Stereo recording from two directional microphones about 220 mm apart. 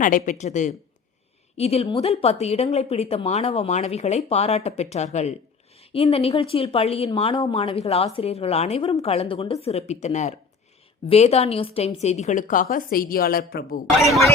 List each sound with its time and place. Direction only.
0.0 s a woman's voice: 35° left (ahead or behind)